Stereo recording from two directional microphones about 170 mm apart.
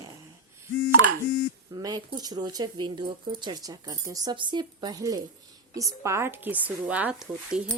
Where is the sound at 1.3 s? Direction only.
25° right (ahead or behind).